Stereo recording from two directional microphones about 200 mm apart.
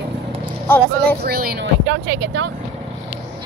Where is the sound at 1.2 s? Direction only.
50° right (ahead or behind).